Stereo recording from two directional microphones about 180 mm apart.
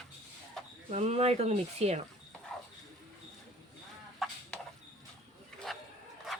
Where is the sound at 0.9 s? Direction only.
40° right (ahead or behind).